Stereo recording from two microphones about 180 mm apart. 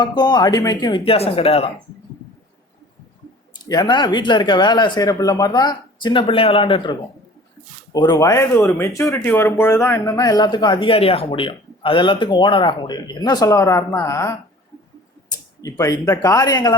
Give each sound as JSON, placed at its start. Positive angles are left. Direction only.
{"t": 0.0, "sound": "speech", "side_deg": 25}
{"t": 3.7, "sound": "speech", "side_deg": 25}